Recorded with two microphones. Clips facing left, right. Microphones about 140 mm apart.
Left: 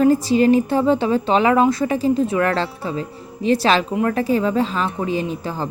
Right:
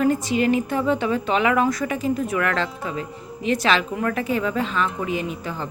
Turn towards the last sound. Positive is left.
turn(degrees=35)  # may be behind; listen again after turning